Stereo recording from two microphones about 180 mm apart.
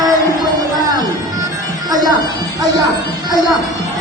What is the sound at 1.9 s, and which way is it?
Speech, 20° right (ahead or behind).